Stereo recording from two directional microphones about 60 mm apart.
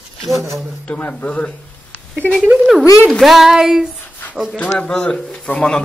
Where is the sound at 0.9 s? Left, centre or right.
Left.